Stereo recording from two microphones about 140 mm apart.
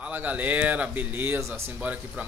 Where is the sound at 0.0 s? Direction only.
10° right (ahead or behind).